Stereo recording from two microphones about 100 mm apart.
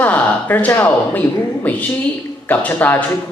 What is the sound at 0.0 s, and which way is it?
A man's voice, 20° left (ahead or behind).